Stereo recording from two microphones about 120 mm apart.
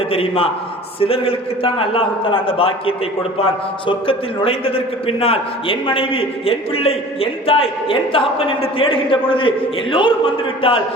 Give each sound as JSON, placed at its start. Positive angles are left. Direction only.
{"t": 0.1, "sound": "a man's voice", "side_deg": 50}